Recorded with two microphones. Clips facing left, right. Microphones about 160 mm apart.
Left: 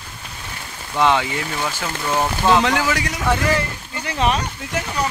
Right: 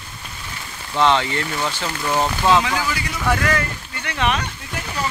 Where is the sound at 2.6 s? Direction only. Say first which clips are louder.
Left 4 dB; 75° left (ahead or behind).